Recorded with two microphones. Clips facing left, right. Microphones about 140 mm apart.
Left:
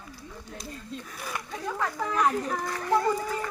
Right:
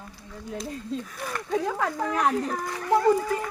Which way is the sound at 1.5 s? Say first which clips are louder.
Right 6 dB; 80° right.